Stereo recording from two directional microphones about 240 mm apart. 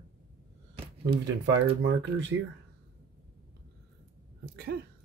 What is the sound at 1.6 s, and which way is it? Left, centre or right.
Speech, right.